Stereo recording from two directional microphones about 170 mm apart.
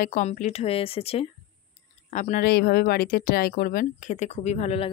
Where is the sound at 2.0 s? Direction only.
45° left (ahead or behind).